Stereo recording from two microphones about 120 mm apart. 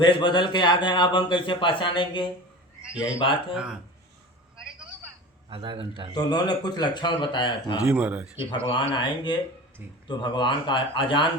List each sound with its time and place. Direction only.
0.0 s a man's voice: 40° left (ahead or behind)
3.5 s speech: 5° right (ahead or behind)
5.5 s a man's voice: 45° right (ahead or behind)
6.1 s speech: 35° left (ahead or behind)
7.9 s speech: 15° right (ahead or behind)
8.4 s a man's voice: 45° left (ahead or behind)